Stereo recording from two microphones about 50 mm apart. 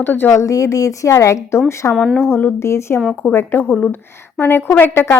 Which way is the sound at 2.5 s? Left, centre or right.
Left.